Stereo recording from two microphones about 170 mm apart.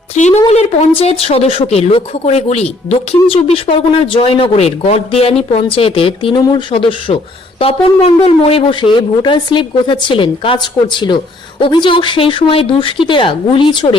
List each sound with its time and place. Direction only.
0.1 s speech: 40° left (ahead or behind)